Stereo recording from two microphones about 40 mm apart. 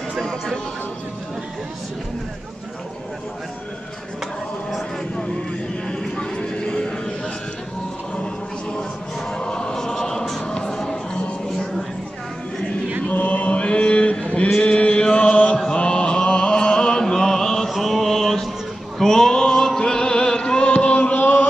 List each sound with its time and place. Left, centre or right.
0.2 s music: centre
5.9 s a sound: left
9.3 s music: left
13.1 s chant: left
15.7 s chant: left
17.6 s mantra: centre
18.9 s music: centre; by 21.2 s left